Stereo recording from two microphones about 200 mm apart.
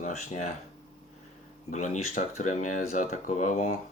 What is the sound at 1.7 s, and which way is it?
Speech, 40° left (ahead or behind).